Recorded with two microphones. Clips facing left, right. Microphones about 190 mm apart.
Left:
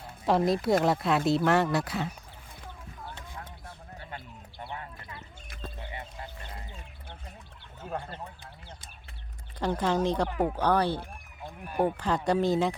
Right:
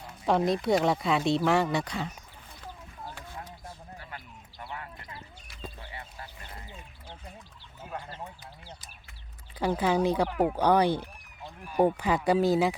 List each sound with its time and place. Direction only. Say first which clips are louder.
0.3 s speech: even; centre (ahead or behind)
4.6 s horse: left 1 dB; 25° left (ahead or behind)
7.9 s a sound: left 4 dB; 35° left (ahead or behind)
9.6 s speech: right 1 dB; 5° right (ahead or behind)